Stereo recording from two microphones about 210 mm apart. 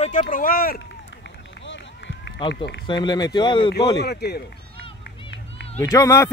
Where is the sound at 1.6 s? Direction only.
60° left (ahead or behind).